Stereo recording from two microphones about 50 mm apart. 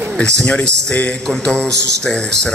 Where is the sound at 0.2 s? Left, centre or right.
Left.